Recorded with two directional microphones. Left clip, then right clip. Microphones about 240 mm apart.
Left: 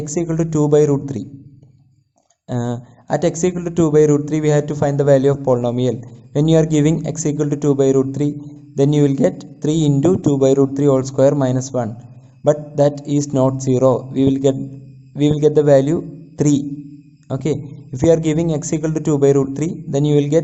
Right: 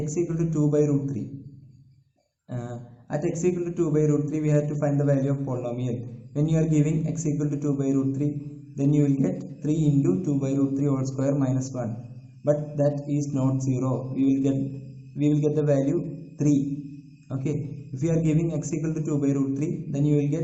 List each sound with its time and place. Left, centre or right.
0.0 s a man's voice: left
2.5 s a man's voice: left
17.2 s a man's voice: left